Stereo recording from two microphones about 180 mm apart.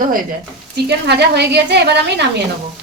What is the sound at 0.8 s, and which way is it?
A woman's voice, 70° right (ahead or behind).